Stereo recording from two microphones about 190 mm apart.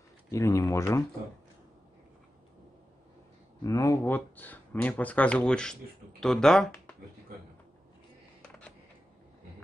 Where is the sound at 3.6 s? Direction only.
15° left (ahead or behind).